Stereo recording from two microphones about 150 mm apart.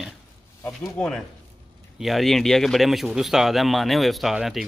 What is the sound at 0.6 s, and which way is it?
A man's voice, 10° left (ahead or behind).